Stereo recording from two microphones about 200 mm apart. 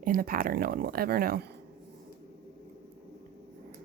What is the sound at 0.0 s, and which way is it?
Speech, 45° right (ahead or behind).